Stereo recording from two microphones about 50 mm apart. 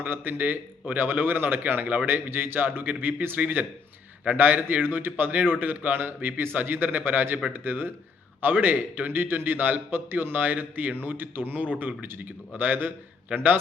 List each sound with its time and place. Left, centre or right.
0.0 s a man's voice: right
11.6 s a man's voice: right
12.0 s a man's voice: right